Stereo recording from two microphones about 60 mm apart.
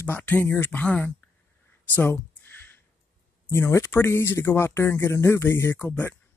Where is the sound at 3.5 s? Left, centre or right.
Left.